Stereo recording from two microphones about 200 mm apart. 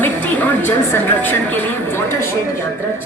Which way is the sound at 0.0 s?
10° left (ahead or behind).